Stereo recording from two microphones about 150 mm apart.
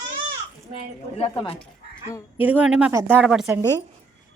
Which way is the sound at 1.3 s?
30° left (ahead or behind).